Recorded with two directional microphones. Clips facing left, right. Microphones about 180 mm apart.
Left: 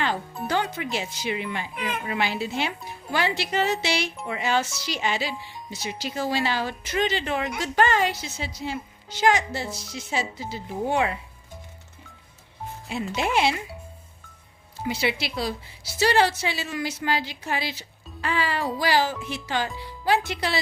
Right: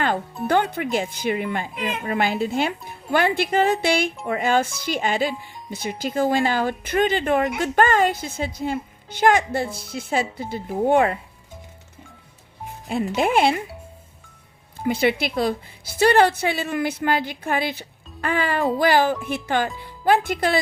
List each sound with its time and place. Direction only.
0.4 s a woman's voice: 60° right (ahead or behind)
13.1 s a woman's voice: 50° right (ahead or behind)
14.8 s a woman's voice: 50° right (ahead or behind)